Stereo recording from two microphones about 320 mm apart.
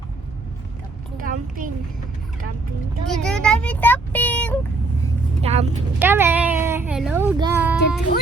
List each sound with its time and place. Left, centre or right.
1.2 s a child's voice: right
3.1 s speech: centre
5.4 s speech: centre
6.0 s a child's voice: centre